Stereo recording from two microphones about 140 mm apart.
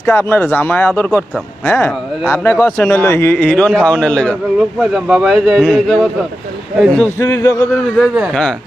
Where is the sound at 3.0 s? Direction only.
15° left (ahead or behind).